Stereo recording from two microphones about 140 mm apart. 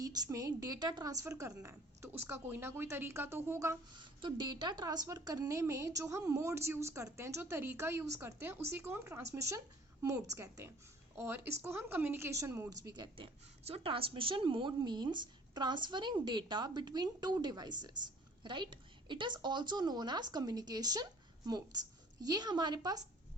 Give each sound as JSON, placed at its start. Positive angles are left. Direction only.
{"t": 0.0, "sound": "a woman's voice", "side_deg": -25}
{"t": 3.9, "sound": "a woman's voice", "side_deg": -35}
{"t": 12.9, "sound": "a woman's voice", "side_deg": -35}